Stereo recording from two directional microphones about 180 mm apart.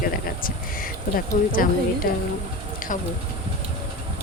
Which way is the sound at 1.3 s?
40° left (ahead or behind).